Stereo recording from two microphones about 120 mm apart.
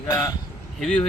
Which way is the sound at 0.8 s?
5° left (ahead or behind).